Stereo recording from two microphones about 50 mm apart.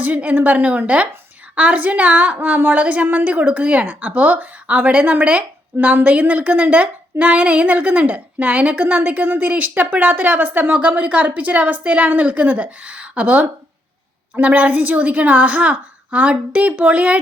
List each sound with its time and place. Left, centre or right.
0.0 s a woman's voice: right
2.3 s a woman's voice: right
12.8 s a woman's voice: right